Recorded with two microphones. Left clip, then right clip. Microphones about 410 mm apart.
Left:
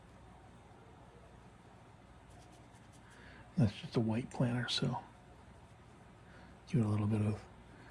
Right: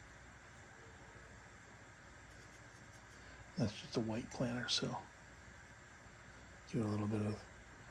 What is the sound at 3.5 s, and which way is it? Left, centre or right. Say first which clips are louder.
Speech: left 4 dB; centre.